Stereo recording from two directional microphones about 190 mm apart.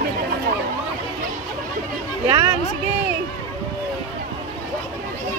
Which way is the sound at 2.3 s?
20° right (ahead or behind).